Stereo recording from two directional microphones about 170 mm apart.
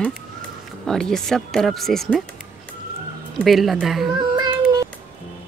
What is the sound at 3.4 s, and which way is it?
Speech, centre (ahead or behind).